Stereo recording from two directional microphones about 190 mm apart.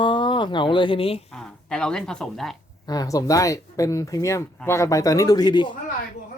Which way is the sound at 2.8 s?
20° left (ahead or behind).